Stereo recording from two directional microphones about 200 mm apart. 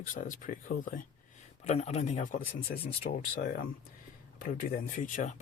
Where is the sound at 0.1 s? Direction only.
40° left (ahead or behind).